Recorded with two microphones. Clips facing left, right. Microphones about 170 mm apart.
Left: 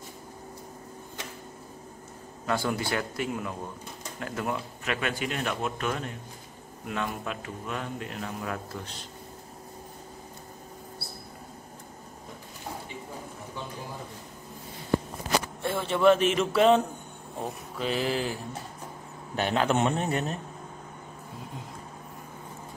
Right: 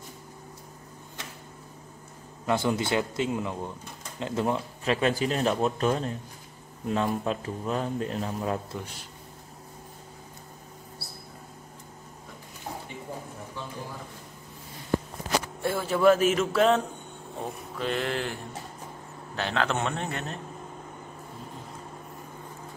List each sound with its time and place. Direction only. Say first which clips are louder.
2.4 s a man's voice: right 3 dB; 20° right (ahead or behind)
15.6 s a man's voice: right 1 dB; 5° right (ahead or behind); by 20.3 s 15° left (ahead or behind)